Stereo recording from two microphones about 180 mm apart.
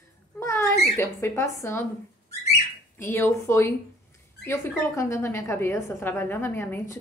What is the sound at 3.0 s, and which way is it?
A woman's voice, 10° left (ahead or behind).